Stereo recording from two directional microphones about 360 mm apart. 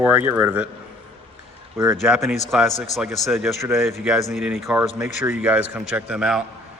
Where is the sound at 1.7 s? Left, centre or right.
Centre.